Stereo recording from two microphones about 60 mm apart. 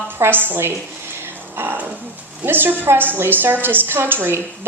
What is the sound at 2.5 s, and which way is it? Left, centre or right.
A woman's voice, right.